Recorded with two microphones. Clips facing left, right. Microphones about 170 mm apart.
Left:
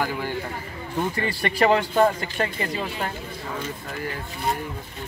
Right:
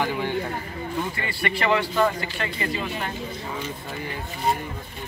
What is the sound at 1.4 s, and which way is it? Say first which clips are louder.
A man's voice: left 3 dB; 40° left (ahead or behind).